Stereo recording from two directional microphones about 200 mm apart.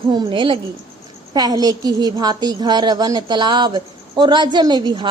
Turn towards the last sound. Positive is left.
turn(degrees=-20)  # may be behind; listen again after turning